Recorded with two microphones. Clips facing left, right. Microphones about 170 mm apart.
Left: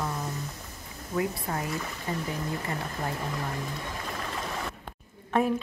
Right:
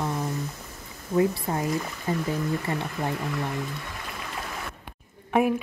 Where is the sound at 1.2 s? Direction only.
25° right (ahead or behind).